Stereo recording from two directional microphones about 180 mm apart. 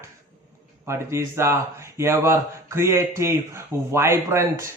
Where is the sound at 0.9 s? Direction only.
15° right (ahead or behind).